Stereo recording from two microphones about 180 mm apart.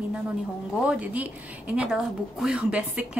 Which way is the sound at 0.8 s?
10° right (ahead or behind).